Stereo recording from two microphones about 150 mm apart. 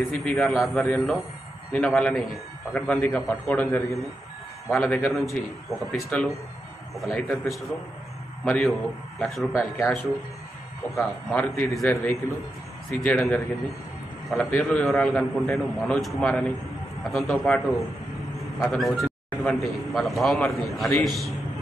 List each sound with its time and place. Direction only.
0.1 s a man's voice: centre (ahead or behind)
4.6 s a man's voice: centre (ahead or behind)
9.8 s a man's voice: 20° left (ahead or behind); by 21.3 s centre (ahead or behind)